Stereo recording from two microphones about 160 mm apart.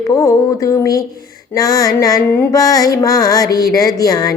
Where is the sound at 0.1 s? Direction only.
20° left (ahead or behind).